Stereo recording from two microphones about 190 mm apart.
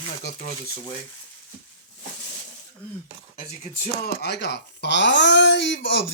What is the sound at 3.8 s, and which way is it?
Speech, 60° left (ahead or behind).